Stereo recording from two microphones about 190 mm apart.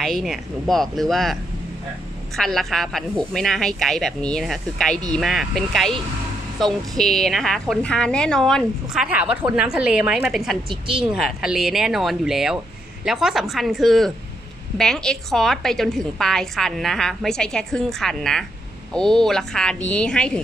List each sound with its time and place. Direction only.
0.0 s a woman's voice: centre (ahead or behind)